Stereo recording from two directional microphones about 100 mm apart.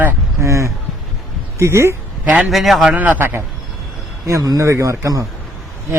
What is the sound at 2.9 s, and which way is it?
Speech, 15° right (ahead or behind).